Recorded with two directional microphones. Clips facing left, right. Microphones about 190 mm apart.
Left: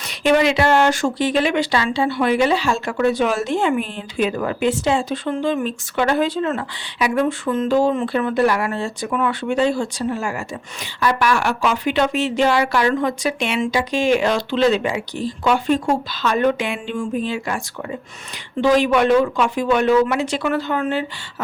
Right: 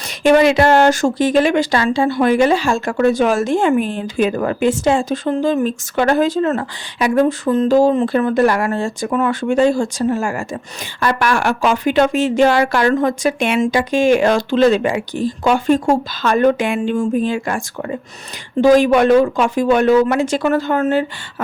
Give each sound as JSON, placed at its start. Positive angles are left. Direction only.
{"t": 0.2, "sound": "speech", "side_deg": -45}